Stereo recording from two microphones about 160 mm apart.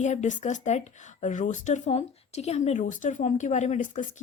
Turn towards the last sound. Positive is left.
turn(degrees=50)  # may be behind; listen again after turning